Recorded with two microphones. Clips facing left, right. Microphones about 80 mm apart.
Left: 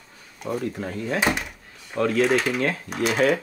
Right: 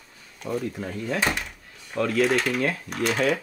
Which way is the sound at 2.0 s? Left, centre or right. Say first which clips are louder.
Left 2 dB; centre.